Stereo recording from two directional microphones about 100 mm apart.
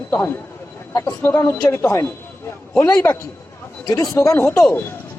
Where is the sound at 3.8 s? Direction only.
30° left (ahead or behind).